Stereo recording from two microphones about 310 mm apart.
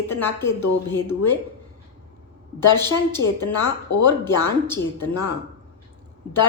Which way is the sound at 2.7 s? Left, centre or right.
Centre.